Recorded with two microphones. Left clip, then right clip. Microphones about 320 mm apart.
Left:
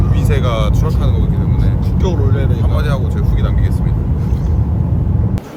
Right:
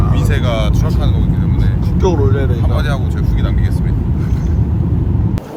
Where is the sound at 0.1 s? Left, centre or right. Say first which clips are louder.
Left 2 dB; centre.